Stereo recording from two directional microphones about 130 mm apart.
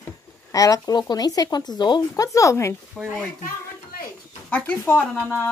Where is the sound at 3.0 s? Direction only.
5° left (ahead or behind).